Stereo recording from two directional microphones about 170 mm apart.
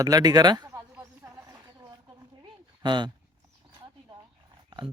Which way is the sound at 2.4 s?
25° right (ahead or behind).